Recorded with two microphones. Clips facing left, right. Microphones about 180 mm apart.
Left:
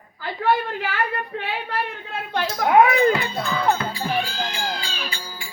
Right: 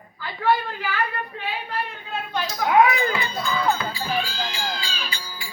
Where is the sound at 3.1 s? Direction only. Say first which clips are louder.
Left 1 dB; 65° left (ahead or behind).